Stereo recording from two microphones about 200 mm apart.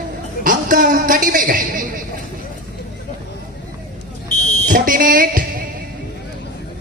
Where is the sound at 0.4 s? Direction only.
45° right (ahead or behind).